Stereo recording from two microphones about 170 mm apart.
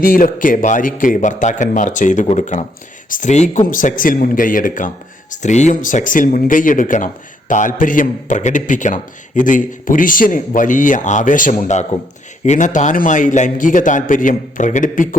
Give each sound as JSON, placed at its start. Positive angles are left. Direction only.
{"t": 0.0, "sound": "speech", "side_deg": 55}